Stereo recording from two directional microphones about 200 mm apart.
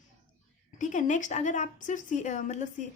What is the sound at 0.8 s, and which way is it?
A woman's voice, 40° left (ahead or behind).